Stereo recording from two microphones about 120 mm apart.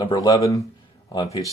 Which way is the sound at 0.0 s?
35° left (ahead or behind).